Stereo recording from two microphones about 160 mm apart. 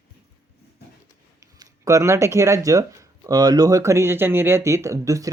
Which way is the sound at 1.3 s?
20° right (ahead or behind).